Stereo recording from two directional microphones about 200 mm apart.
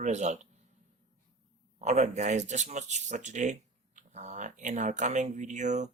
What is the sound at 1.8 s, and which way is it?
Speech, 35° right (ahead or behind).